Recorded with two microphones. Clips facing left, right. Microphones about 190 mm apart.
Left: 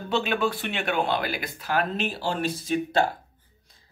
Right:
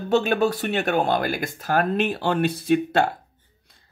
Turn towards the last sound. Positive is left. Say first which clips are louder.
# right 4 dB
turn(degrees=-60)  # may be behind; listen again after turning